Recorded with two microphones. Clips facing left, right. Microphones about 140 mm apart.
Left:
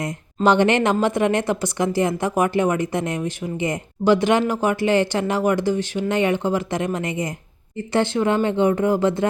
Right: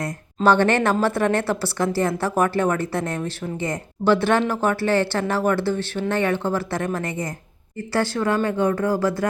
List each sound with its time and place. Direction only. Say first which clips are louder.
0.4 s speech: left 1 dB; 15° left (ahead or behind)